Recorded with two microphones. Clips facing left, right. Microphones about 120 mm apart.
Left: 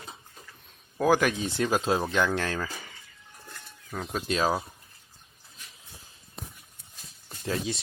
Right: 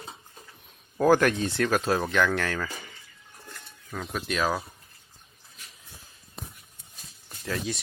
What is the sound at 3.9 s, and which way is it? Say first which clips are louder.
Speech: left 1 dB; 30° left (ahead or behind).